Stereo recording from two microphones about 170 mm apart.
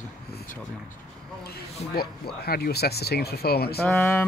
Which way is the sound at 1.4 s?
65° left (ahead or behind).